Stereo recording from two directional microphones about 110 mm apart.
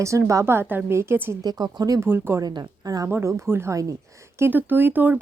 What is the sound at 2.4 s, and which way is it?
Speech, 35° right (ahead or behind).